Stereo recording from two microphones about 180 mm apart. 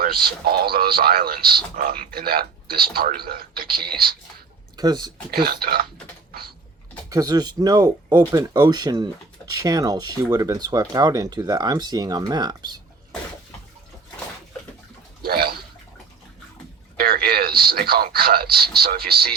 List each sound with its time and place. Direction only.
0.0 s speech: 55° right (ahead or behind)
4.8 s speech: 25° right (ahead or behind)
5.3 s speech: 55° right (ahead or behind)
7.1 s speech: 20° right (ahead or behind)
15.2 s a sound: 60° right (ahead or behind)
17.0 s radio: 55° right (ahead or behind)